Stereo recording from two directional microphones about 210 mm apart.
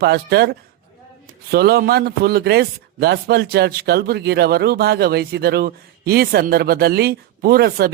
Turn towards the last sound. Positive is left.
turn(degrees=-45)  # may be behind; listen again after turning